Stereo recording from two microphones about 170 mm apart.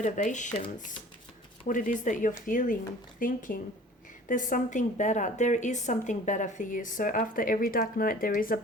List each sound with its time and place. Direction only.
0.0 s a woman's voice: 45° left (ahead or behind)
1.6 s a woman's voice: 50° left (ahead or behind)